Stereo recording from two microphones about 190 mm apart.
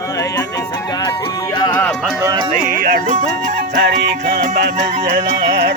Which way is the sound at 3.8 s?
55° right (ahead or behind).